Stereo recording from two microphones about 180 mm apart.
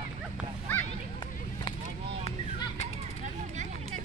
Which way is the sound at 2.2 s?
35° left (ahead or behind).